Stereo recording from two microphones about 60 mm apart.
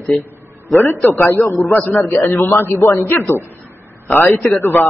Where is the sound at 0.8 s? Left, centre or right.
Left.